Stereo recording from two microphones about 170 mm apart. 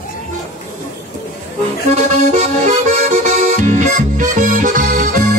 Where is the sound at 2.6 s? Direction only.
45° right (ahead or behind).